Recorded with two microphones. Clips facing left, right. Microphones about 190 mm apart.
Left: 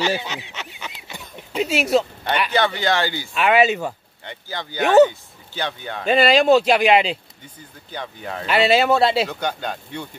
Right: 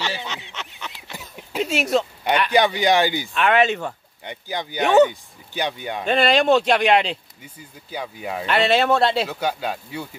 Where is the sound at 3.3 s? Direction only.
5° left (ahead or behind).